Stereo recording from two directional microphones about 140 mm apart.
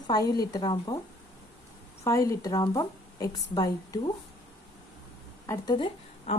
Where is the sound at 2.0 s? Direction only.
25° left (ahead or behind).